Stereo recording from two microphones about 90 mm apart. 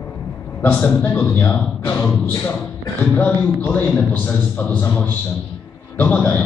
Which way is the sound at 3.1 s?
20° left (ahead or behind).